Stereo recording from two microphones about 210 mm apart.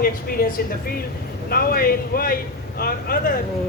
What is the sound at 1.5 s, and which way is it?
A man's voice, 45° left (ahead or behind).